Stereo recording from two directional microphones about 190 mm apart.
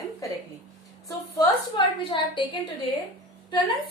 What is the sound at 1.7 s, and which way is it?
Speech, 25° left (ahead or behind).